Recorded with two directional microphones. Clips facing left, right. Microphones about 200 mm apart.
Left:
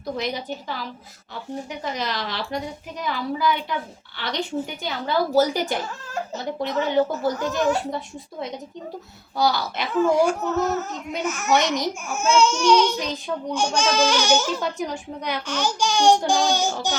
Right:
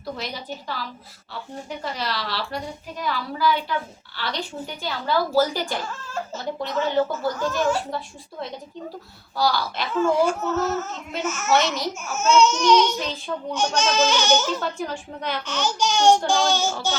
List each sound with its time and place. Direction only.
0.2 s speech: 20° left (ahead or behind)
4.8 s speech: 20° left (ahead or behind)